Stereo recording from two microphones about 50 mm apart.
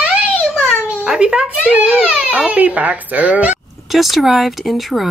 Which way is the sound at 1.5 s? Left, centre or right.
Right.